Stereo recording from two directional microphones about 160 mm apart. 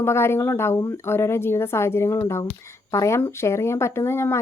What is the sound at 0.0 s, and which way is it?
Speech, 15° left (ahead or behind).